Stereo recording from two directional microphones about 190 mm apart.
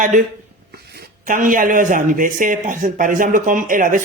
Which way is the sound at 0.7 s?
55° right (ahead or behind).